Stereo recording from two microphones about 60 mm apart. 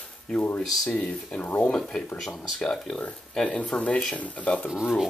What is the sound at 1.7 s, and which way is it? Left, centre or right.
Speech, centre.